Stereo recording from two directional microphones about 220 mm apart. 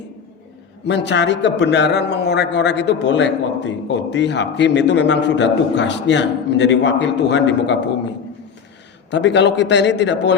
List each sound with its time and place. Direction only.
0.9 s a man's voice: 50° left (ahead or behind)
9.0 s a man's voice: 55° left (ahead or behind)